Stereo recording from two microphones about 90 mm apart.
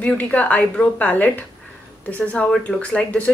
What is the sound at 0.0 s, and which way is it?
Speech, 15° left (ahead or behind).